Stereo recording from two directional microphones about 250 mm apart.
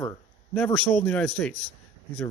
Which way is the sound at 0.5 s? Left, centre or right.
Centre.